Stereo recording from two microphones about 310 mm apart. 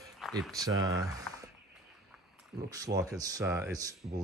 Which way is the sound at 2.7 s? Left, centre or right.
Centre.